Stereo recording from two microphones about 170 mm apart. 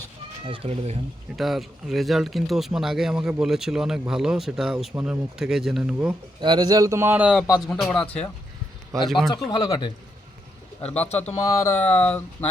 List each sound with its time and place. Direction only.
0.4 s speech: 30° right (ahead or behind)
1.4 s speech: centre (ahead or behind)
6.4 s speech: 25° right (ahead or behind); by 7.3 s 10° right (ahead or behind)
7.4 s speech: 20° left (ahead or behind)
7.9 s speech: 10° left (ahead or behind)
9.5 s speech: 20° left (ahead or behind)
10.8 s speech: 40° left (ahead or behind)
11.6 s speech: 10° left (ahead or behind)